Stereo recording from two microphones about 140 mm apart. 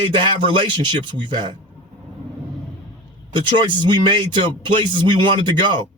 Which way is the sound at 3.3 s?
35° right (ahead or behind).